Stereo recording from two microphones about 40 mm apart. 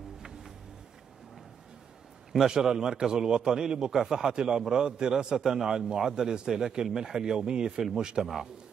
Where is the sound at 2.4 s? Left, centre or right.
Centre.